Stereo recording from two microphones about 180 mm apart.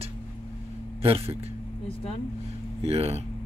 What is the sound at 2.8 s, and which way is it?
Speech, 35° right (ahead or behind).